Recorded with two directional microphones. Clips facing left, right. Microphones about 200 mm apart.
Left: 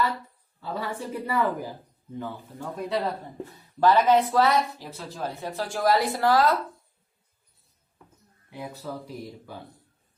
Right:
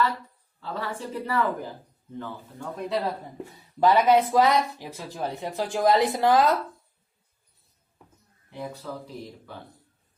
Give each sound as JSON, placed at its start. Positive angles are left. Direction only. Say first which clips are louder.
{"t": 0.6, "sound": "a woman's voice", "louder": "left 1 dB", "side_deg": 10}
{"t": 3.4, "sound": "speech", "louder": "even", "side_deg": -10}
{"t": 8.4, "sound": "a woman's voice", "louder": "right 1 dB", "side_deg": 5}